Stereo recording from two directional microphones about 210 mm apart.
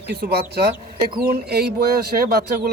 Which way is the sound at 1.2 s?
50° right (ahead or behind).